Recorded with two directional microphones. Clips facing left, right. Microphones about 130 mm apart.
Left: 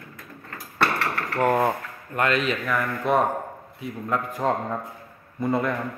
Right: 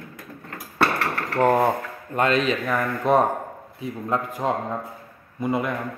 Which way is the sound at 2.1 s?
25° right (ahead or behind).